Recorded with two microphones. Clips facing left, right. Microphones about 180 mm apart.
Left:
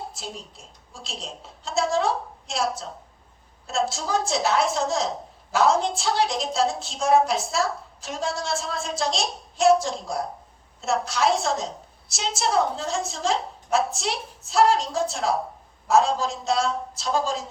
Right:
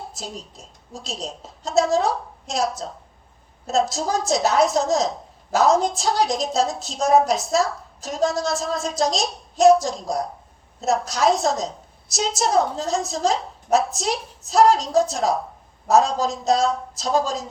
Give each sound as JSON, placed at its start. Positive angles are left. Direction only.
{"t": 0.1, "sound": "a woman's voice", "side_deg": -40}